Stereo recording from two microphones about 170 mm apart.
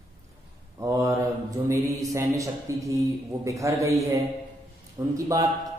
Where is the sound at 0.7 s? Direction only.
20° right (ahead or behind).